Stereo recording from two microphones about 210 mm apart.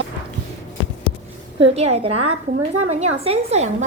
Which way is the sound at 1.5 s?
30° right (ahead or behind).